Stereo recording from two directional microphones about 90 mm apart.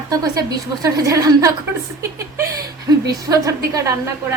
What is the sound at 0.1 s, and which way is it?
A woman's voice, 45° right (ahead or behind).